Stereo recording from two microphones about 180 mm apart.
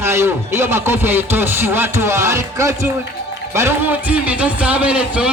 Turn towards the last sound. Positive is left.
turn(degrees=-5)  # may be behind; listen again after turning